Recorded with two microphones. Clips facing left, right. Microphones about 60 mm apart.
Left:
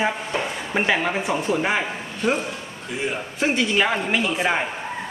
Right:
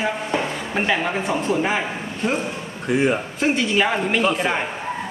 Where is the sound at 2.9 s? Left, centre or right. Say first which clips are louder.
Right 9 dB; right.